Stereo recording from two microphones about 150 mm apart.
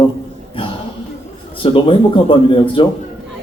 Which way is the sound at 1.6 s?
35° left (ahead or behind).